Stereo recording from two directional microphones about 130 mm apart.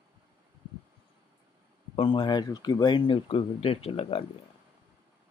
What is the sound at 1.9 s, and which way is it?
Speech, 40° left (ahead or behind).